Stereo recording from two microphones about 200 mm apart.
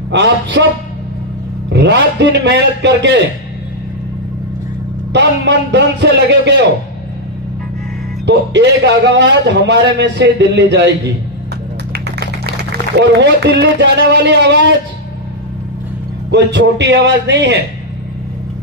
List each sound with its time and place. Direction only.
0.1 s a man's voice: 65° right (ahead or behind)
1.7 s a man's voice: 60° right (ahead or behind)
5.1 s a man's voice: 60° right (ahead or behind)
8.3 s a man's voice: 60° right (ahead or behind)
12.9 s a man's voice: 55° right (ahead or behind)
16.3 s a man's voice: 60° right (ahead or behind)